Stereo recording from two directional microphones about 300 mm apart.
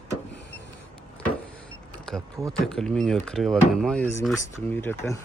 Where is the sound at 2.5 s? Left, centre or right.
Centre.